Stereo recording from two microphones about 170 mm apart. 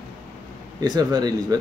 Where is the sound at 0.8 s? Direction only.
25° right (ahead or behind).